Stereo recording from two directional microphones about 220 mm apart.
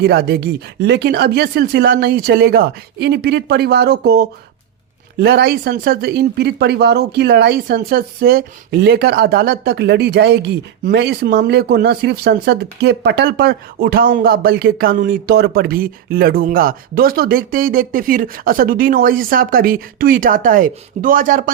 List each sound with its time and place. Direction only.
0.0 s speech: 45° right (ahead or behind)